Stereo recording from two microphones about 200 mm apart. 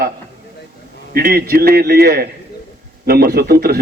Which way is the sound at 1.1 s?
50° right (ahead or behind).